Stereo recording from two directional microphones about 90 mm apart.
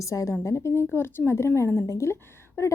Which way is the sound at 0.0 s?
35° left (ahead or behind).